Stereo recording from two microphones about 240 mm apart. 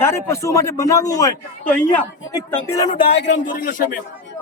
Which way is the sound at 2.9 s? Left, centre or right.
Left.